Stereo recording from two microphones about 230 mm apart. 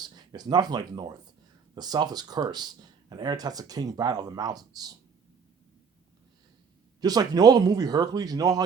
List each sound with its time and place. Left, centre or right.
0.0 s speech: centre
7.0 s speech: centre